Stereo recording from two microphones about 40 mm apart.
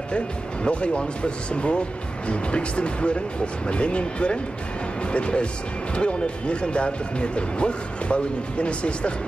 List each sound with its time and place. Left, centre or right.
0.7 s speech: left